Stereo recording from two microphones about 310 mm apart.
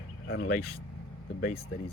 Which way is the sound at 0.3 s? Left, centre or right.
Left.